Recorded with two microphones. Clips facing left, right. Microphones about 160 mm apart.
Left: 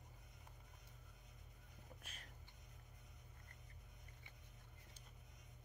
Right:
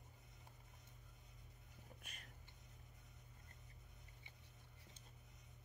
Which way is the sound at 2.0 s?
Centre (ahead or behind).